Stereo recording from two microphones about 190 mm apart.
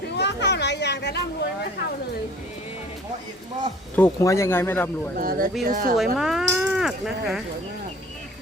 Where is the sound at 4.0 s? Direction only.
15° left (ahead or behind).